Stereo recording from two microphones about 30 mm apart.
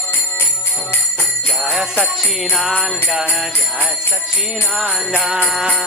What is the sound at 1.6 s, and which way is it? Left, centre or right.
Jingle bell, centre.